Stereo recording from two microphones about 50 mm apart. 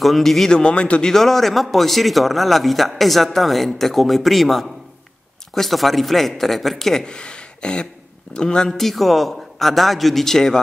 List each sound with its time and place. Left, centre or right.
0.0 s speech: centre
0.5 s a man's voice: centre
1.0 s speech: centre